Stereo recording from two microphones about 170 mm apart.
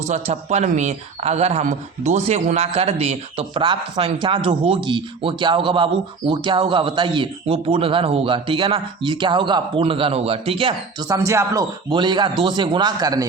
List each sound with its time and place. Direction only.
0.1 s speech: 40° right (ahead or behind)
11.1 s speech: 20° right (ahead or behind)